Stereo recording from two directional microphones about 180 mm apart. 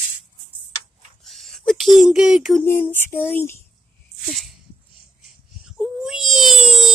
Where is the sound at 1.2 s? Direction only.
Centre (ahead or behind).